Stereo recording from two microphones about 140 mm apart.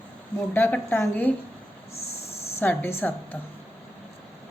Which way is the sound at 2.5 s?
15° left (ahead or behind).